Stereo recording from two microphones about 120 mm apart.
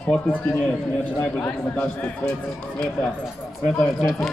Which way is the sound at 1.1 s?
10° left (ahead or behind).